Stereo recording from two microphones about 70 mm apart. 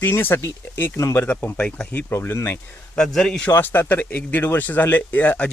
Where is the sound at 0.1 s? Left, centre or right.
Left.